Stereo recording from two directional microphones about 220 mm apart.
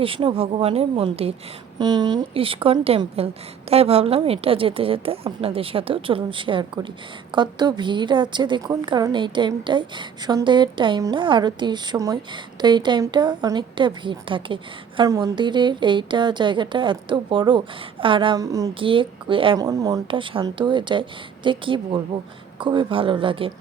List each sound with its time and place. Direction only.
0.0 s a woman's voice: 25° right (ahead or behind)